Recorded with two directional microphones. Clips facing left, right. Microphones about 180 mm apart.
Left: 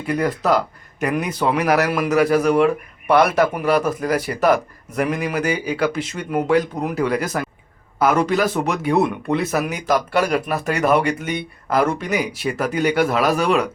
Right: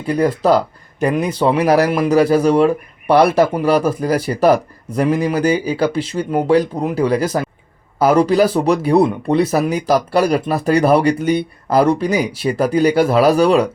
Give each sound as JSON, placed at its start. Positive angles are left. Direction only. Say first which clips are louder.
{"t": 0.1, "sound": "speech", "louder": "right 5 dB", "side_deg": -30}